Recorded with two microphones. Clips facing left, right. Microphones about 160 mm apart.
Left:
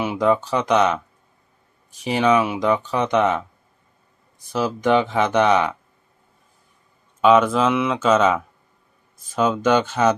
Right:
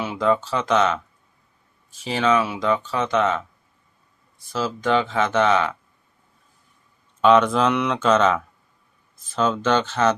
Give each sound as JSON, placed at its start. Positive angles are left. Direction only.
{"t": 0.0, "sound": "speech", "side_deg": 15}
{"t": 2.0, "sound": "speech", "side_deg": 15}
{"t": 7.2, "sound": "speech", "side_deg": 5}